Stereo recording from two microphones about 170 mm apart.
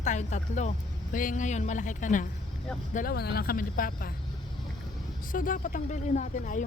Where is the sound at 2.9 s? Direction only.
60° left (ahead or behind).